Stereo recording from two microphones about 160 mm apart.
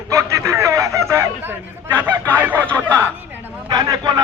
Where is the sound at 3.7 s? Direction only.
25° right (ahead or behind).